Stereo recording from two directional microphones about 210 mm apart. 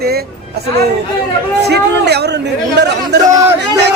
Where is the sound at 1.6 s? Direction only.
50° right (ahead or behind).